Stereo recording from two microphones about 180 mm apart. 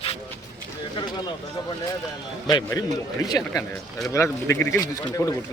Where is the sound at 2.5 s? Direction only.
20° left (ahead or behind).